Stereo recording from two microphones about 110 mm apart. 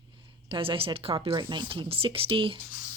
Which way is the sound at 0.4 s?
50° right (ahead or behind).